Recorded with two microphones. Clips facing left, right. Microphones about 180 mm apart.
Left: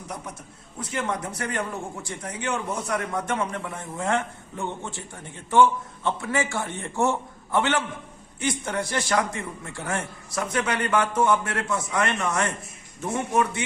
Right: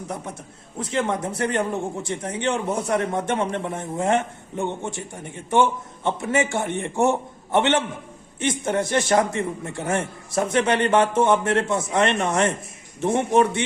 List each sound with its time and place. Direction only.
0.8 s a man's voice: 30° right (ahead or behind)